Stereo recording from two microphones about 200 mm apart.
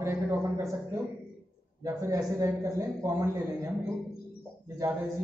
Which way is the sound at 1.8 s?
15° right (ahead or behind).